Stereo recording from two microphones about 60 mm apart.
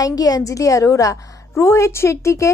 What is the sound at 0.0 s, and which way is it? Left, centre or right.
A woman's voice, left.